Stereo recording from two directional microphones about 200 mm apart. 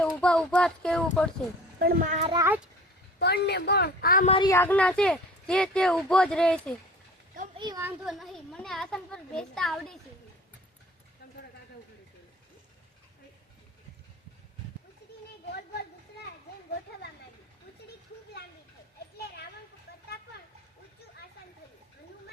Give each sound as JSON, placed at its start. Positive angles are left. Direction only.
{"t": 0.0, "sound": "speech", "side_deg": 5}
{"t": 1.8, "sound": "a child's voice", "side_deg": -40}
{"t": 2.3, "sound": "speech", "side_deg": -15}
{"t": 3.2, "sound": "a woman's voice", "side_deg": 55}
{"t": 4.3, "sound": "speech", "side_deg": 25}
{"t": 4.5, "sound": "speech", "side_deg": 10}
{"t": 7.6, "sound": "speech", "side_deg": -15}
{"t": 8.0, "sound": "speech", "side_deg": 0}